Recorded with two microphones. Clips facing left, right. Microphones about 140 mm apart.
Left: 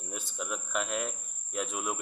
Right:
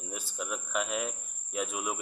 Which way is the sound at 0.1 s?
Centre (ahead or behind).